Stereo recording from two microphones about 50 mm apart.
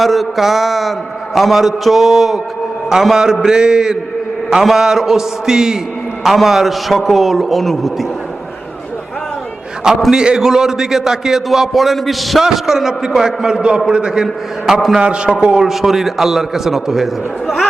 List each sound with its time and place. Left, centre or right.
0.0 s a man's voice: centre
10.1 s a man's voice: centre
15.0 s a man's voice: centre
15.6 s a man's voice: centre